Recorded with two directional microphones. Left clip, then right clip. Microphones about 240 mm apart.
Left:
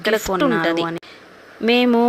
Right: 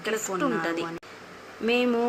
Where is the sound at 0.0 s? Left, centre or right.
Left.